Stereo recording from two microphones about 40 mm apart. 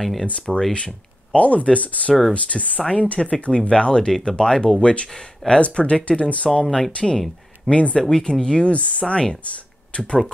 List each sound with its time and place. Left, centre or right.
0.0 s speech: centre
0.7 s speech: left
6.6 s speech: centre
6.9 s speech: left
8.6 s speech: left
9.5 s a sound: left